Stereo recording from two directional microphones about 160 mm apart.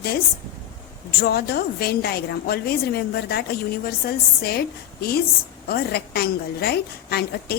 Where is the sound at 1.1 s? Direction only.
85° left.